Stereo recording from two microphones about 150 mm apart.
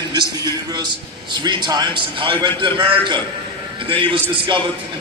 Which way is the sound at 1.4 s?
30° right (ahead or behind).